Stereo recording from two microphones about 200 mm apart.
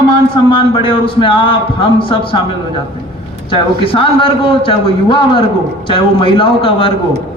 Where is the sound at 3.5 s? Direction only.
25° left (ahead or behind).